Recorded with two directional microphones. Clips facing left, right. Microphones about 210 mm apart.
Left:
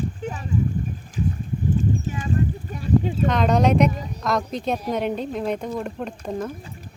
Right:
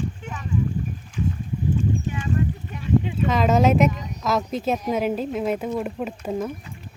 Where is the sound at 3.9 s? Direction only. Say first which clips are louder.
Left 2 dB; 30° left (ahead or behind).